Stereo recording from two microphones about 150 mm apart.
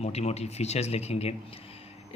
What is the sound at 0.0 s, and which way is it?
Speech, 45° left (ahead or behind).